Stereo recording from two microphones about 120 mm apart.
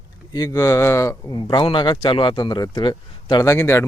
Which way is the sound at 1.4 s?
45° left (ahead or behind).